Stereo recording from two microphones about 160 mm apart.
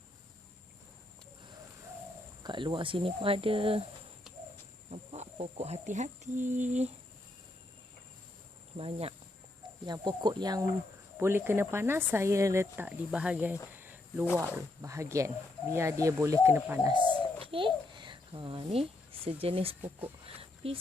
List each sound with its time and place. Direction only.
2.4 s speech: 30° right (ahead or behind)
4.9 s speech: 45° right (ahead or behind)
8.8 s speech: 35° right (ahead or behind)
9.8 s speech: 25° right (ahead or behind); by 13.6 s 10° right (ahead or behind)
13.7 s a sound: 15° right (ahead or behind)
14.5 s speech: 15° right (ahead or behind)
16.9 s babbling: 30° right (ahead or behind)
20.2 s a sound: 35° right (ahead or behind)